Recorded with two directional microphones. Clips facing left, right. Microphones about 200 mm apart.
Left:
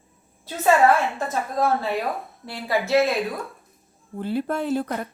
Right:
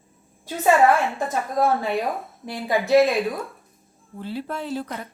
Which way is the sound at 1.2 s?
15° right (ahead or behind).